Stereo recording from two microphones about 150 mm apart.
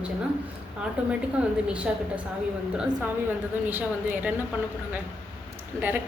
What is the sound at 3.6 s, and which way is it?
Speech, 10° right (ahead or behind).